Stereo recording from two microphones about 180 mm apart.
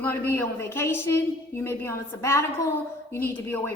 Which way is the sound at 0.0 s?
10° left (ahead or behind).